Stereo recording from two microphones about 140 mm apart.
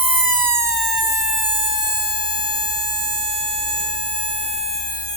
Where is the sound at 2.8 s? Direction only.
40° right (ahead or behind).